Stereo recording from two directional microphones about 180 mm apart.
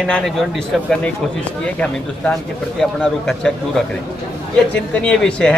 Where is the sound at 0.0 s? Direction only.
Centre (ahead or behind).